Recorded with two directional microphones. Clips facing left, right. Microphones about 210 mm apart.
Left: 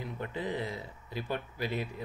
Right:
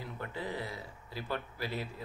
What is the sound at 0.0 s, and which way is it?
Speech, 20° left (ahead or behind).